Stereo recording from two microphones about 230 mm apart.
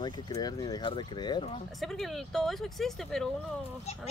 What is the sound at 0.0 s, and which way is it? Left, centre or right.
Speech, centre.